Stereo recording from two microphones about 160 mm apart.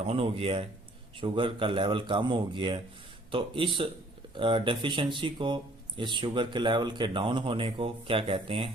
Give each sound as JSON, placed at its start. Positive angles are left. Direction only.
{"t": 0.0, "sound": "speech", "side_deg": -40}